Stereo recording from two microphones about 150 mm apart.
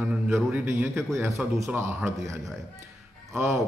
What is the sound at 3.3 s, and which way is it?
Speech, 20° right (ahead or behind).